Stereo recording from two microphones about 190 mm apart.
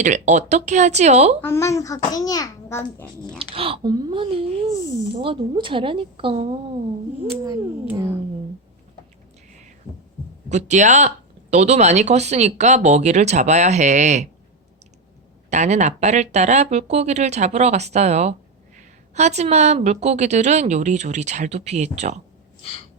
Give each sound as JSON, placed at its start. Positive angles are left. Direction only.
{"t": 0.0, "sound": "a woman's voice", "side_deg": -40}
{"t": 1.4, "sound": "a child's voice", "side_deg": 15}
{"t": 3.3, "sound": "a woman's voice", "side_deg": -30}
{"t": 7.9, "sound": "speech", "side_deg": -15}
{"t": 10.5, "sound": "a woman's voice", "side_deg": -40}
{"t": 15.4, "sound": "a woman's voice", "side_deg": -35}